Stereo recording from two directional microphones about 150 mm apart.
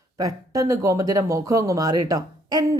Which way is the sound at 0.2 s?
20° right (ahead or behind).